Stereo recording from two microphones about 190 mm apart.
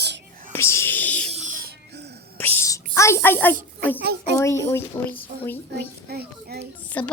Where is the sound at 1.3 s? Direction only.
40° right (ahead or behind).